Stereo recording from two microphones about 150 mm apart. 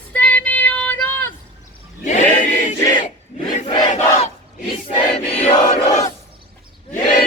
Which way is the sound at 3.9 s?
50° left (ahead or behind).